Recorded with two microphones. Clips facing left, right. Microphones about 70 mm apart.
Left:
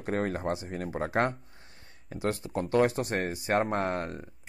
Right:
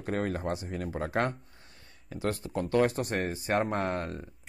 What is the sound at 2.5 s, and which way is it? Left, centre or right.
Speech, left.